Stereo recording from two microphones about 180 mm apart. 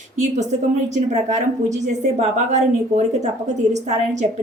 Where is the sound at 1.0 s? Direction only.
40° right (ahead or behind).